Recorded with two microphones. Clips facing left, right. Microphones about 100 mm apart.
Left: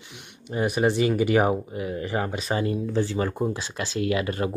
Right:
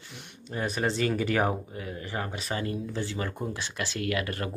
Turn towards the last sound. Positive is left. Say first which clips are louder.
# left 6 dB
turn(degrees=20)  # may be behind; listen again after turning